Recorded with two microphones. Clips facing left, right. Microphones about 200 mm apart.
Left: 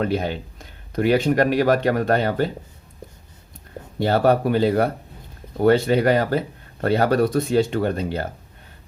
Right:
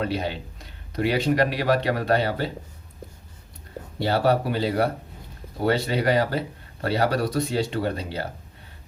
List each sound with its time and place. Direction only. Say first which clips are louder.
0.0 s speech: left 4 dB; 50° left (ahead or behind)
4.0 s speech: left 4 dB; 50° left (ahead or behind)